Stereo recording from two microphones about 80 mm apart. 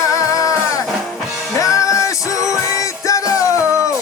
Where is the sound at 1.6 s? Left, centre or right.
Left.